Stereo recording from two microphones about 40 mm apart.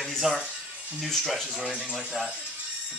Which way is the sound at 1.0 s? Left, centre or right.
Centre.